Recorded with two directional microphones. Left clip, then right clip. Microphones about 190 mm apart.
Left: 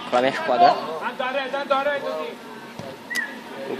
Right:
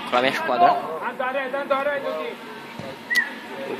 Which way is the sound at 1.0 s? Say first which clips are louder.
Even; 50° left (ahead or behind).